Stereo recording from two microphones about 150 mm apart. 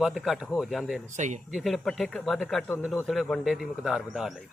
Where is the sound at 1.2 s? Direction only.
55° right (ahead or behind).